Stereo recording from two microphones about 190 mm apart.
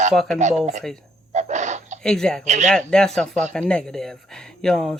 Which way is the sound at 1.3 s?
40° right (ahead or behind).